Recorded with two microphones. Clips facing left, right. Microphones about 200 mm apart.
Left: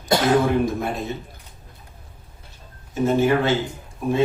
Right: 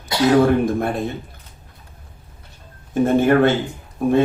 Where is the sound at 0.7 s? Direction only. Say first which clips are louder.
Right 5 dB; 55° right (ahead or behind).